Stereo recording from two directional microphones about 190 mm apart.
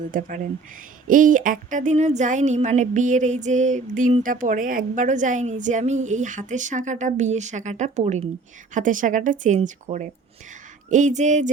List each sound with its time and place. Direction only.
0.1 s speech: 45° right (ahead or behind)